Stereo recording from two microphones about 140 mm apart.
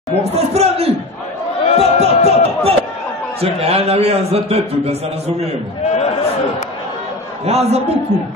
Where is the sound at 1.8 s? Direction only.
45° right (ahead or behind).